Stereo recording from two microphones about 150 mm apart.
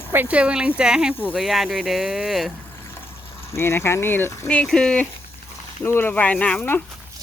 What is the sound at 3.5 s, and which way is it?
Speech, 15° left (ahead or behind).